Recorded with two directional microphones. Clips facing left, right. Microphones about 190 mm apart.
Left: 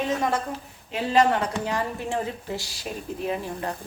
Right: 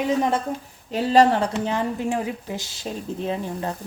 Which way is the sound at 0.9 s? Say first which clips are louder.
Right 4 dB; 35° right (ahead or behind).